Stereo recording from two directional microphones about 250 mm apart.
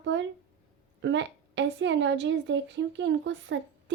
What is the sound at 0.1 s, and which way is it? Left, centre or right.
A woman's voice, right.